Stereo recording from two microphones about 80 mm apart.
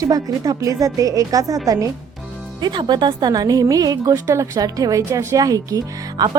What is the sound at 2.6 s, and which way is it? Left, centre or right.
A woman's voice, right.